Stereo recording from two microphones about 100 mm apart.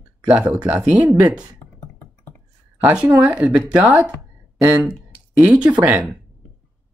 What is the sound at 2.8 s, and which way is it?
Speech, 15° right (ahead or behind).